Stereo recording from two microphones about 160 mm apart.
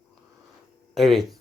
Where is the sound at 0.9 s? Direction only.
Centre (ahead or behind).